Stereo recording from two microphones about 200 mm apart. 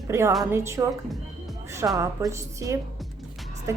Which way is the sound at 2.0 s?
15° right (ahead or behind).